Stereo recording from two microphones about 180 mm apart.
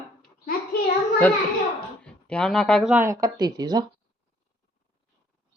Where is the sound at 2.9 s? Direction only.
15° right (ahead or behind).